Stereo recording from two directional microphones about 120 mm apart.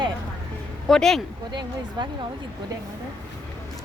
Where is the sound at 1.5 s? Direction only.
40° right (ahead or behind).